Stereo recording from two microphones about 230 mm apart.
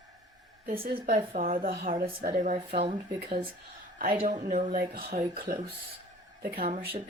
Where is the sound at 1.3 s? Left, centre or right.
Right.